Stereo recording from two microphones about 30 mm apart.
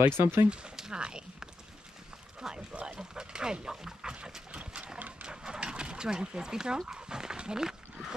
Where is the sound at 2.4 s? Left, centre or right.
Centre.